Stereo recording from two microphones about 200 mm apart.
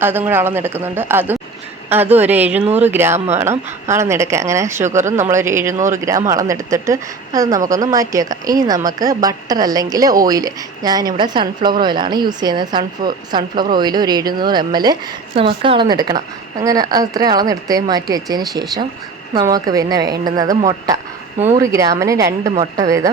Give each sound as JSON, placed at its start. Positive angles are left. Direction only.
{"t": 0.0, "sound": "speech", "side_deg": -10}
{"t": 2.6, "sound": "speech", "side_deg": -35}
{"t": 2.9, "sound": "speech", "side_deg": -10}
{"t": 4.8, "sound": "speech", "side_deg": -35}
{"t": 5.3, "sound": "a woman's voice", "side_deg": -15}
{"t": 22.5, "sound": "speech", "side_deg": -35}